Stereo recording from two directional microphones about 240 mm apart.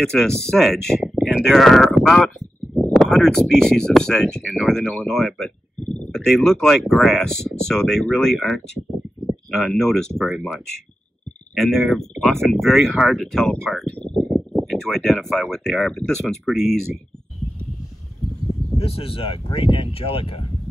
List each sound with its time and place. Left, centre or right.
0.0 s speech: centre
18.8 s speech: left